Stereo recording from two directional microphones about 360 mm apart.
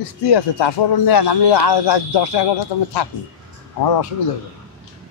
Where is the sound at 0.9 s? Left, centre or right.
Left.